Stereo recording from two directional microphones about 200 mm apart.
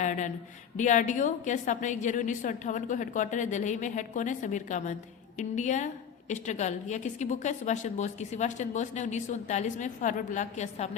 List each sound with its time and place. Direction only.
0.0 s a woman's voice: 40° left (ahead or behind)